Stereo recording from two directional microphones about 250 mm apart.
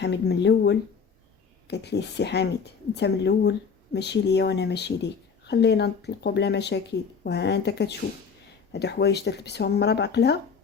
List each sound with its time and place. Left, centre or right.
0.0 s speech: left